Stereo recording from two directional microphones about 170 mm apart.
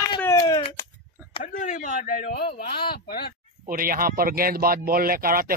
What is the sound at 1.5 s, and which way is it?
A man's voice, 50° left (ahead or behind).